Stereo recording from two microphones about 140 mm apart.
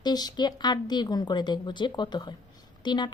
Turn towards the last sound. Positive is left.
turn(degrees=30)  # may be behind; listen again after turning